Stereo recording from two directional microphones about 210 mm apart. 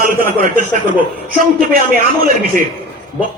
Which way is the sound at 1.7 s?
45° right (ahead or behind).